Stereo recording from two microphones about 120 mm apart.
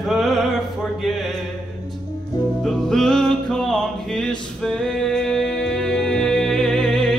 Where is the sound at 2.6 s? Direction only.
5° left (ahead or behind).